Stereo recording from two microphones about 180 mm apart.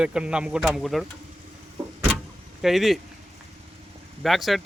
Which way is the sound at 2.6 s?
Centre (ahead or behind).